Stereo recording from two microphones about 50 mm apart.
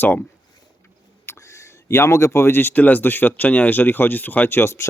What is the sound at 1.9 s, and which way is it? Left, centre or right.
Speech, left.